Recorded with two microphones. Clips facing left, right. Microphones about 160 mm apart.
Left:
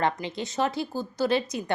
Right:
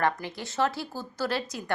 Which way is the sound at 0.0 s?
20° left (ahead or behind).